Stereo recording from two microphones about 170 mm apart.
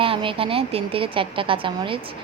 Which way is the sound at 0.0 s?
30° right (ahead or behind).